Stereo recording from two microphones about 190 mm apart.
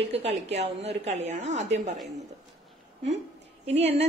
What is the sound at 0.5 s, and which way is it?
A woman's voice, 35° right (ahead or behind).